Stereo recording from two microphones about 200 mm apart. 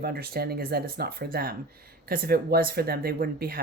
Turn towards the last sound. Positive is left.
turn(degrees=-50)  # may be behind; listen again after turning